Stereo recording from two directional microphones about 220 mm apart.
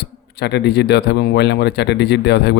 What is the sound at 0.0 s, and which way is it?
Speech, 50° left (ahead or behind).